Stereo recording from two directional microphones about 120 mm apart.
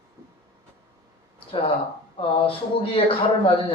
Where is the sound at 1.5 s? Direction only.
55° left (ahead or behind).